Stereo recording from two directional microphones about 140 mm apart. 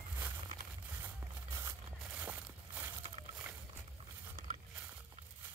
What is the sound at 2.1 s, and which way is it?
Crushing, 10° right (ahead or behind).